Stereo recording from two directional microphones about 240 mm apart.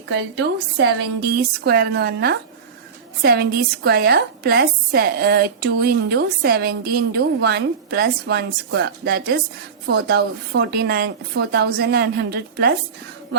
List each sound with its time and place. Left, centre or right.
0.1 s a woman's voice: right